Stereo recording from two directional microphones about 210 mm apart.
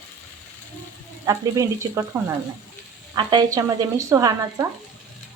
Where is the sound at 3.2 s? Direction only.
20° right (ahead or behind).